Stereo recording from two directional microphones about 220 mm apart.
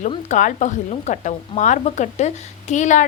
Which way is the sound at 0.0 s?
30° left (ahead or behind).